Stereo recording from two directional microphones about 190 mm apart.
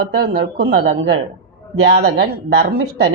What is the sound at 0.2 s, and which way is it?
A woman's voice, 55° right (ahead or behind).